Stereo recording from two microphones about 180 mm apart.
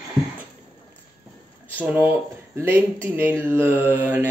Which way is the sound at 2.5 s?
10° right (ahead or behind).